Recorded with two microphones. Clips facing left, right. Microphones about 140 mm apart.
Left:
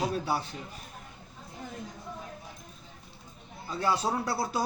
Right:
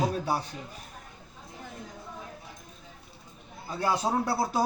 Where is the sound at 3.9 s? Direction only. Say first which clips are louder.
Right 2 dB; 25° right (ahead or behind).